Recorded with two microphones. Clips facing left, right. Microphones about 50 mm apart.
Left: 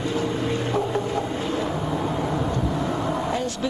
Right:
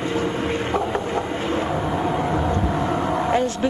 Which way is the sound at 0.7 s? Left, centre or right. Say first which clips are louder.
Right 1 dB; right.